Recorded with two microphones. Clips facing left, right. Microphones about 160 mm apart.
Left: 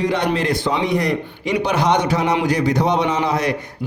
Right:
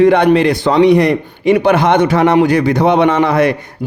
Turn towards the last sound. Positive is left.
turn(degrees=-60)  # may be behind; listen again after turning